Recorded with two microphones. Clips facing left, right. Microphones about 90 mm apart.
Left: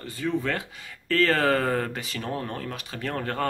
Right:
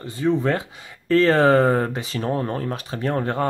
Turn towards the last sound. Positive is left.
turn(degrees=-25)  # may be behind; listen again after turning